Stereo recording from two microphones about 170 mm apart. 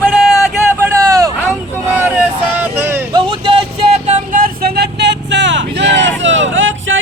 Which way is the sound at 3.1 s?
30° right (ahead or behind).